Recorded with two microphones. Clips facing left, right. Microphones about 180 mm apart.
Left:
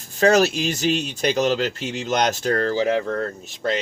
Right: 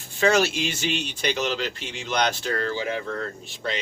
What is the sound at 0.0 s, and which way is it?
Speech, 40° left (ahead or behind).